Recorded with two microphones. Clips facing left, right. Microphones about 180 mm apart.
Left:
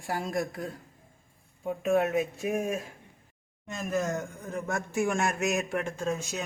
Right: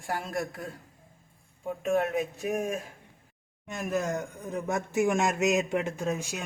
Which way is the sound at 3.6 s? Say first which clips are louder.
Even; 15° right (ahead or behind).